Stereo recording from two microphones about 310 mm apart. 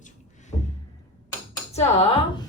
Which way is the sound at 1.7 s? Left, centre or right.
Centre.